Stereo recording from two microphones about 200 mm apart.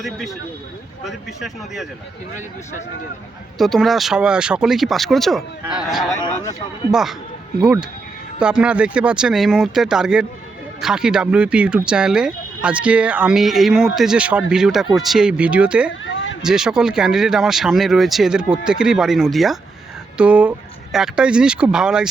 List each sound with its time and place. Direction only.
1.0 s speech: centre (ahead or behind)
3.6 s speech: centre (ahead or behind)
6.1 s speech: 15° left (ahead or behind)
6.9 s speech: centre (ahead or behind)